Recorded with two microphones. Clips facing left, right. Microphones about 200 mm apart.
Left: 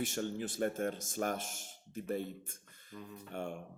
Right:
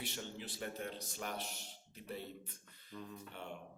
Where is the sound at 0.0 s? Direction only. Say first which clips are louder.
Left 9 dB; 50° left (ahead or behind).